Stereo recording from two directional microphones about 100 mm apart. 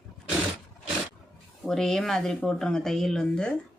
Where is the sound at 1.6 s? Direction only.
5° left (ahead or behind).